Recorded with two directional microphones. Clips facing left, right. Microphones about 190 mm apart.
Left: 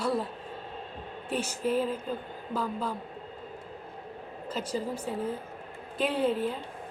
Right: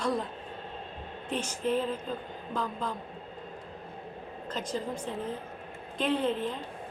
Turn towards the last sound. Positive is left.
turn(degrees=10)  # may be behind; listen again after turning